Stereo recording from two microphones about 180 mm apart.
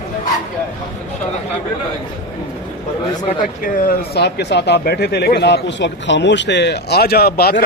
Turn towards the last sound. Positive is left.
turn(degrees=60)  # may be behind; listen again after turning